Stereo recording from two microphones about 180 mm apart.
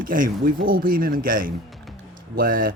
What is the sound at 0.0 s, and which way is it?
Speech, 50° right (ahead or behind).